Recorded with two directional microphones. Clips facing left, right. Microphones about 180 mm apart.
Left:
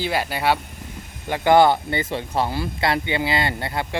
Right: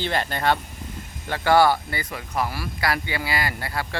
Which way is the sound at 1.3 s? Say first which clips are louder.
Left 3 dB; 20° left (ahead or behind).